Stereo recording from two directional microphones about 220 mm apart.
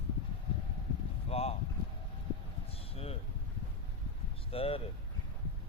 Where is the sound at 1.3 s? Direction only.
25° left (ahead or behind).